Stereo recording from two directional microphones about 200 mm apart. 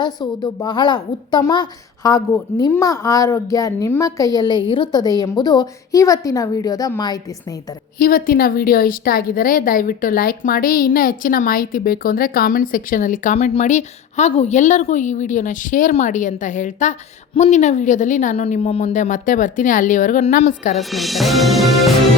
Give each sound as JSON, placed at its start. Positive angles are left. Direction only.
{"t": 0.0, "sound": "a woman's voice", "side_deg": 20}
{"t": 7.9, "sound": "a woman's voice", "side_deg": 45}
{"t": 20.7, "sound": "music", "side_deg": 0}